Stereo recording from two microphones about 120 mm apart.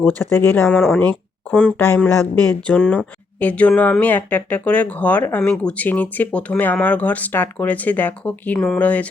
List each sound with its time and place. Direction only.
0.0 s speech: 15° left (ahead or behind)